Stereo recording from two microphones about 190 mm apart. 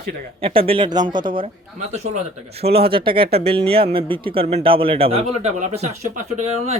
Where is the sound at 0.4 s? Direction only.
30° right (ahead or behind).